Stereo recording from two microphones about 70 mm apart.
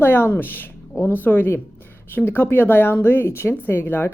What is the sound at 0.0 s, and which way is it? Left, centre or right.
A woman's voice, left.